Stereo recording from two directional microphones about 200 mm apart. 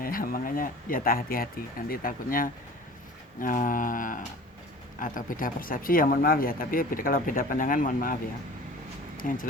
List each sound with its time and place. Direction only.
0.0 s speech: 45° left (ahead or behind)